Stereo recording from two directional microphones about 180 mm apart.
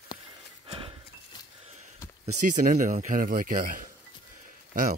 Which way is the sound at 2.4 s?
45° right (ahead or behind).